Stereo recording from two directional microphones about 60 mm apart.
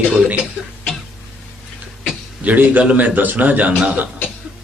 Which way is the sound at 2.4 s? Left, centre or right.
Right.